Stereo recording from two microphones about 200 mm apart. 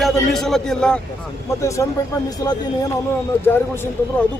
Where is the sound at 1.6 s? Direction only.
15° left (ahead or behind).